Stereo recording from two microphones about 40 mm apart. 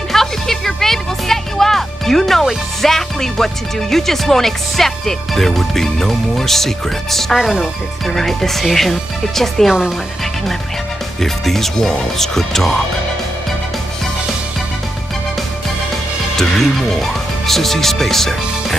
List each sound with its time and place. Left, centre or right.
0.1 s music: centre
2.8 s speech: centre
7.3 s speech: centre
8.1 s speech: centre
9.7 s speech: centre
11.1 s speech: centre
16.3 s speech: centre